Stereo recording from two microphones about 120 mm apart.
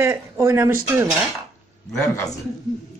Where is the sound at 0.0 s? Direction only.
25° right (ahead or behind).